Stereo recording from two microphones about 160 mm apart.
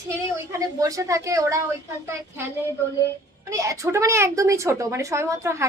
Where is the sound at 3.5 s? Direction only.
20° right (ahead or behind).